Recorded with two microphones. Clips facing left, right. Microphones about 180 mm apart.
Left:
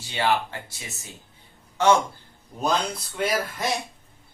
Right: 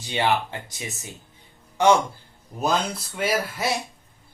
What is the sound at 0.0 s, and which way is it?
Speech, 20° right (ahead or behind).